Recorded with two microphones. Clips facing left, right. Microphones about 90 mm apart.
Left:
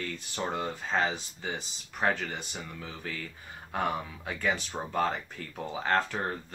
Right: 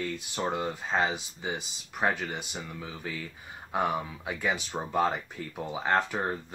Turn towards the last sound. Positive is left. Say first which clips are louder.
# right 2 dB
turn(degrees=-15)  # may be behind; listen again after turning